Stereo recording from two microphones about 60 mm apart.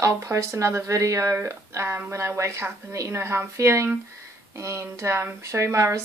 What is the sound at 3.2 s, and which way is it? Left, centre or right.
Speech, right.